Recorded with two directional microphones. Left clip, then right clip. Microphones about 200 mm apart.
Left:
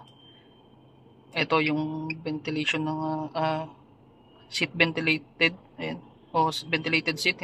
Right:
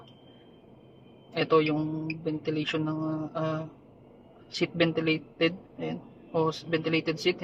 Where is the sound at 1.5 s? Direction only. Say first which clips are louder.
Right 2 dB; 40° left (ahead or behind).